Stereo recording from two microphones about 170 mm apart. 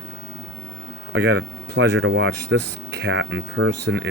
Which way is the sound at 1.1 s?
90° right.